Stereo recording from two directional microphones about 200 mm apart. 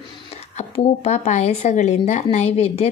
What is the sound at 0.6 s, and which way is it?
Speech, 35° left (ahead or behind).